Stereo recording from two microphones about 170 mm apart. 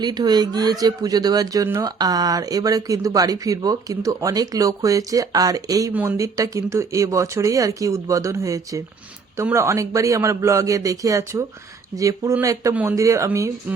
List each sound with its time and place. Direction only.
0.0 s a man's voice: 25° right (ahead or behind)